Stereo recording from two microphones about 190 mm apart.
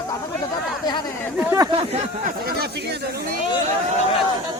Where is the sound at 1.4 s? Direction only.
15° right (ahead or behind).